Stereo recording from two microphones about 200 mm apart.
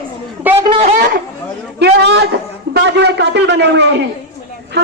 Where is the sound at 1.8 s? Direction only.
60° right (ahead or behind).